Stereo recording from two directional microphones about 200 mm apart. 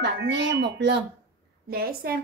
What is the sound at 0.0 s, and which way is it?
A woman's voice, 60° right (ahead or behind).